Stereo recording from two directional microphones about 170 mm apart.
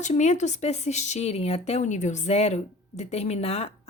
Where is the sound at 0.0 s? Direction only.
45° left (ahead or behind).